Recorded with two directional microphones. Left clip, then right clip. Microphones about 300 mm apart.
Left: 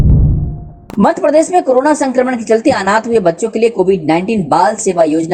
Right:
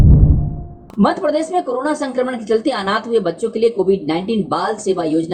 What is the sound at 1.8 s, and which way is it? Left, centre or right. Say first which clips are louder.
A woman's voice: left 7 dB; centre.